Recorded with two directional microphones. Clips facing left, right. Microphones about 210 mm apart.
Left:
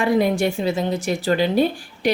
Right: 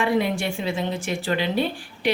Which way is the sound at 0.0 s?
40° left (ahead or behind).